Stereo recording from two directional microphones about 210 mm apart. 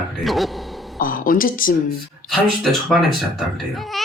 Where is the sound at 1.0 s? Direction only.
40° left (ahead or behind).